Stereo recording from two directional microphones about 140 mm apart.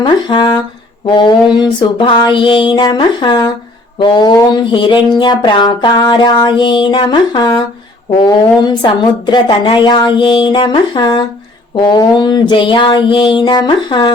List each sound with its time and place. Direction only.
0.0 s a woman's voice: 35° left (ahead or behind)
8.6 s a woman's voice: 30° left (ahead or behind)